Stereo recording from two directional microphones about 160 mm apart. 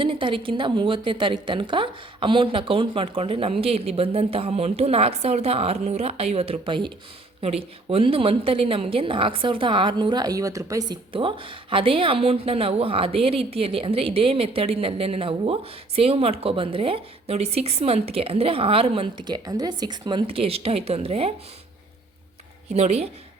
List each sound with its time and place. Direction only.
0.0 s a woman's voice: 30° right (ahead or behind)
22.7 s speech: 40° right (ahead or behind)